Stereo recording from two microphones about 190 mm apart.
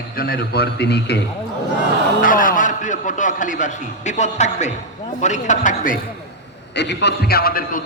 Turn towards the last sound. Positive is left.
turn(degrees=50)  # may be behind; listen again after turning